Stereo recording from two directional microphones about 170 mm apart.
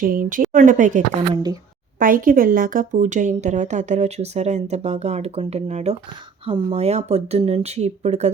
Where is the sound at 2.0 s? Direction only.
55° right (ahead or behind).